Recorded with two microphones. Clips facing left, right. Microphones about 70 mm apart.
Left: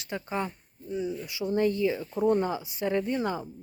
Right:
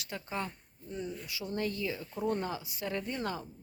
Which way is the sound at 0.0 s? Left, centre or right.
Left.